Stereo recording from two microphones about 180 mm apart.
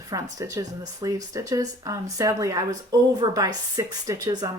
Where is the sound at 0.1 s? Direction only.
20° right (ahead or behind).